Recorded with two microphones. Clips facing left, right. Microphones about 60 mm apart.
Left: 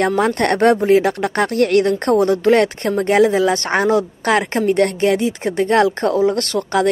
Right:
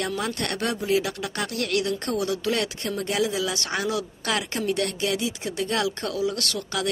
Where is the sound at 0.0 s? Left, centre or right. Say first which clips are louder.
Left 12 dB; left.